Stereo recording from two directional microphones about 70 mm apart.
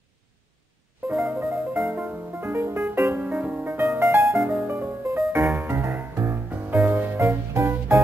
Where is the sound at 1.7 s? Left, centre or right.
Right.